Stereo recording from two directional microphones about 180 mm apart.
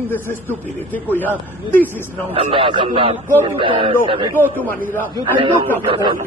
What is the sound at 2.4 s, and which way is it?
A man's voice, 30° right (ahead or behind).